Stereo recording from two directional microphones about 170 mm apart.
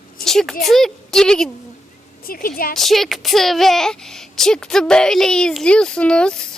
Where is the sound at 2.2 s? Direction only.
60° left (ahead or behind).